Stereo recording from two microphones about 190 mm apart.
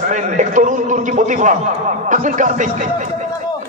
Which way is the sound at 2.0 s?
40° right (ahead or behind).